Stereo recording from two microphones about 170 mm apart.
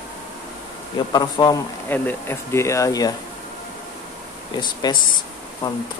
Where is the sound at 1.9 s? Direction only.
10° left (ahead or behind).